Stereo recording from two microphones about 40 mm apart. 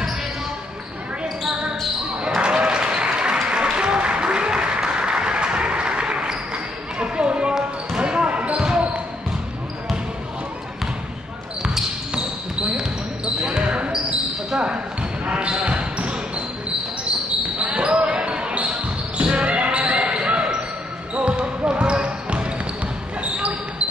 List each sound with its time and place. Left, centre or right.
2.2 s applause: right
7.5 s basketball bounce: right
11.6 s basketball bounce: centre
15.2 s basketball bounce: right
17.6 s basketball bounce: right